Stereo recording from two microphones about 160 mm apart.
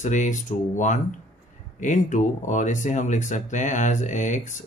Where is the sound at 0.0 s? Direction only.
50° left (ahead or behind).